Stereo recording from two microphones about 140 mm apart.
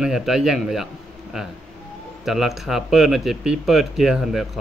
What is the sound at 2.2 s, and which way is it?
Speech, centre (ahead or behind).